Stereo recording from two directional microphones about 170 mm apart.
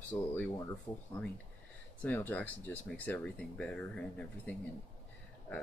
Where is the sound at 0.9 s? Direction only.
20° left (ahead or behind).